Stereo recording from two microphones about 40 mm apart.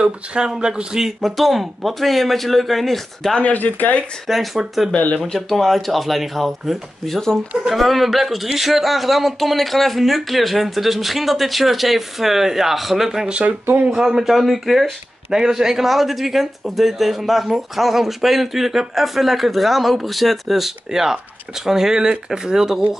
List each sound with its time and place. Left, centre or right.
0.0 s speech: right
1.0 s speech: centre
3.4 s speech: left
4.6 s speech: centre
4.9 s speech: left
5.2 s speech: centre
13.3 s speech: right
13.9 s speech: centre
15.3 s speech: centre